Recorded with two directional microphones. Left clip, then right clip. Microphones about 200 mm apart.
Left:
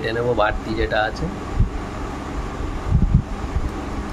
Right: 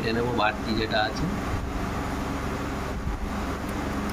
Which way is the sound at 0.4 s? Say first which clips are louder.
Left 5 dB; 50° left (ahead or behind).